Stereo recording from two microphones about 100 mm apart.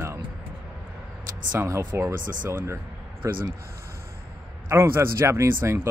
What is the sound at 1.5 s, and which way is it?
Speech, 25° right (ahead or behind).